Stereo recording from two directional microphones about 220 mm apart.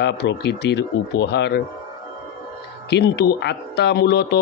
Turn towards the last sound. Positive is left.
turn(degrees=50)  # may be behind; listen again after turning